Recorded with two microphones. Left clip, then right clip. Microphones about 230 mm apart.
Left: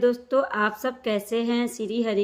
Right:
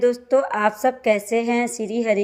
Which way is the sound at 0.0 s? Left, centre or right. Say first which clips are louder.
Right 4 dB; centre.